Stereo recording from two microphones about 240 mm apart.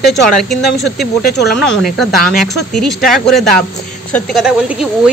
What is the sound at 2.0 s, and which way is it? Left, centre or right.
A woman's voice, centre.